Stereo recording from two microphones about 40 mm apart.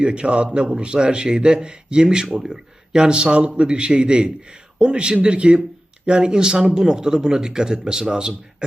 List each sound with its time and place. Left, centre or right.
0.0 s a man's voice: right